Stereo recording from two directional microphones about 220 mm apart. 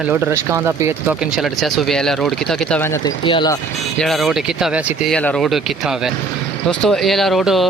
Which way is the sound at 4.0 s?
Centre (ahead or behind).